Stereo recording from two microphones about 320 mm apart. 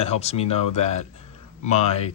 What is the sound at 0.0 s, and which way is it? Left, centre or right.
Speech, centre.